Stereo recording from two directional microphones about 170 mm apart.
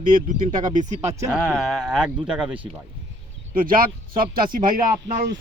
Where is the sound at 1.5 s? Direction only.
Centre (ahead or behind).